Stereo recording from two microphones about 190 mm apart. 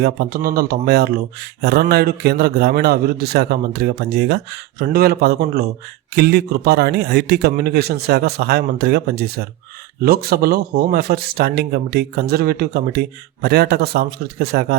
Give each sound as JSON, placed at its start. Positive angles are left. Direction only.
{"t": 0.0, "sound": "speech", "side_deg": -50}